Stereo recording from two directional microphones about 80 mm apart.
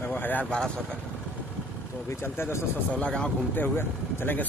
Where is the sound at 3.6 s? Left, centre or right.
Left.